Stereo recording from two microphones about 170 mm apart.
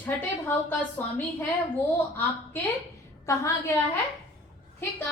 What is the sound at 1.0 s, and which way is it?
Speech, 15° left (ahead or behind).